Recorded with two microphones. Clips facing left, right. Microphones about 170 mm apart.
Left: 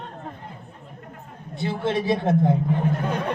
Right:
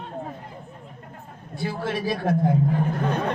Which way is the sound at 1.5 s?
25° left (ahead or behind).